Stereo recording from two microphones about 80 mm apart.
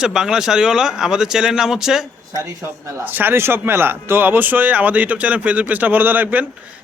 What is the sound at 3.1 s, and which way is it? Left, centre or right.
A man's voice, right.